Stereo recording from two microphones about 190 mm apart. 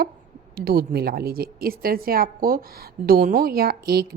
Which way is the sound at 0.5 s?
55° right (ahead or behind).